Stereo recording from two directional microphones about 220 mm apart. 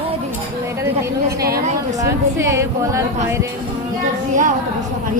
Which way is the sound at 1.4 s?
45° right (ahead or behind).